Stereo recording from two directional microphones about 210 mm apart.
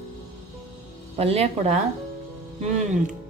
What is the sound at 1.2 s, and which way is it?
Speech, 30° right (ahead or behind).